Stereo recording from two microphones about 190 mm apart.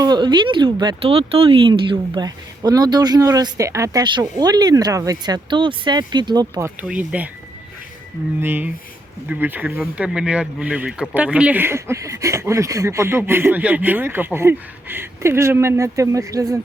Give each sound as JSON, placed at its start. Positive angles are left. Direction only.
{"t": 0.0, "sound": "speech", "side_deg": -20}
{"t": 6.8, "sound": "speech", "side_deg": -5}
{"t": 8.4, "sound": "speech", "side_deg": -10}